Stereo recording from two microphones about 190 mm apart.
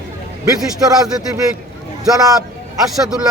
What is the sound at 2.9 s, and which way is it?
Speech, centre (ahead or behind).